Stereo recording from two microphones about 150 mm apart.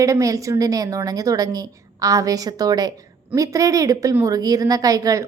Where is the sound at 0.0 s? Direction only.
20° right (ahead or behind).